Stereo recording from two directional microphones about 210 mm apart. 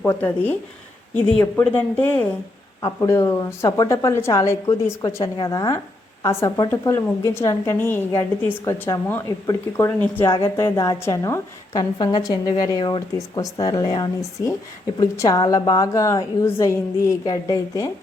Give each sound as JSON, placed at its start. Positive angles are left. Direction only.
{"t": 0.0, "sound": "a woman's voice", "side_deg": 10}